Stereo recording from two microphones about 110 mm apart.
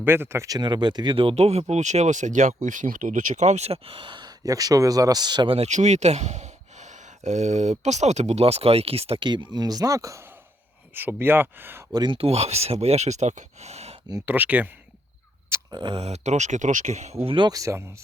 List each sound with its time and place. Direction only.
0.0 s speech: 20° right (ahead or behind); by 5.5 s 40° right (ahead or behind)
5.5 s speech: 90° right; by 10.2 s 30° right (ahead or behind)
11.2 s speech: 20° right (ahead or behind)
11.9 s speech: 45° right (ahead or behind)
12.2 s speech: 70° right (ahead or behind)
14.3 s speech: 15° right (ahead or behind)
15.7 s speech: 45° right (ahead or behind)
16.0 s speech: 75° right (ahead or behind); by 17.2 s 90° right
17.2 s speech: 50° right (ahead or behind)
17.5 s speech: 30° right (ahead or behind)